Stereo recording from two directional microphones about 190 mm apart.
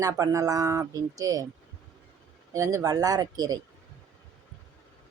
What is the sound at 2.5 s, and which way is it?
Speech, 15° right (ahead or behind).